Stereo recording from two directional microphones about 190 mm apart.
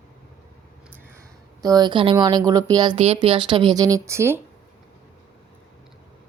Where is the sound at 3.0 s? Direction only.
30° right (ahead or behind); by 4.3 s 15° right (ahead or behind).